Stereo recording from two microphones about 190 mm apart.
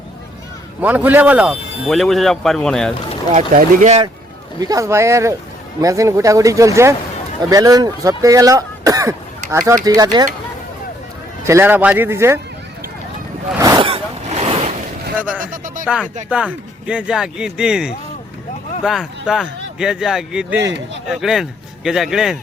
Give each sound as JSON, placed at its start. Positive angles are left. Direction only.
{"t": 0.8, "sound": "speech", "side_deg": -10}
{"t": 3.3, "sound": "speech", "side_deg": -40}
{"t": 4.6, "sound": "speech", "side_deg": -15}
{"t": 11.4, "sound": "speech", "side_deg": -10}
{"t": 13.6, "sound": "a sound", "side_deg": -15}
{"t": 13.8, "sound": "vehicle", "side_deg": -30}
{"t": 15.4, "sound": "speech", "side_deg": -45}
{"t": 16.3, "sound": "speech", "side_deg": -5}